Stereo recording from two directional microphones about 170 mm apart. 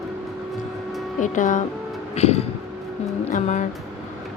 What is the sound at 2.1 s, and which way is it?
Music, 40° left (ahead or behind).